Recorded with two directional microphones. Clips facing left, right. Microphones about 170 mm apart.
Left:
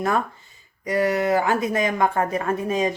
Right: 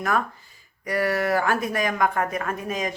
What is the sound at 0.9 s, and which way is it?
Speech, 20° left (ahead or behind).